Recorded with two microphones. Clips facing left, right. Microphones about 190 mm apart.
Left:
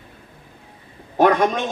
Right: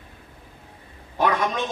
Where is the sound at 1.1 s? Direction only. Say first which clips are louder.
Left 7 dB; 50° left (ahead or behind).